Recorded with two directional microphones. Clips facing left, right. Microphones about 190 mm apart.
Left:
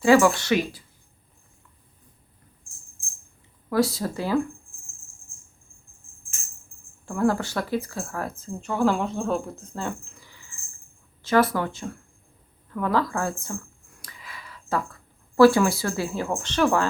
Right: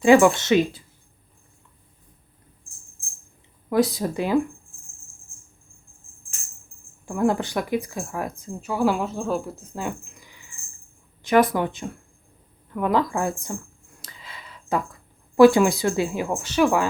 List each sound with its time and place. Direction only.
0.0 s speech: 20° right (ahead or behind)
3.7 s speech: 20° right (ahead or behind)
7.0 s speech: 15° right (ahead or behind)
14.0 s a sound: 25° right (ahead or behind)
15.4 s speech: 20° right (ahead or behind)